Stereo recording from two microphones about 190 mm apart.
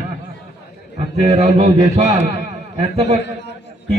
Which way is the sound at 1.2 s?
35° right (ahead or behind).